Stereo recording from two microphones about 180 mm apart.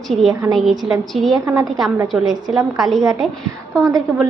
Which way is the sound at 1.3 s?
20° right (ahead or behind).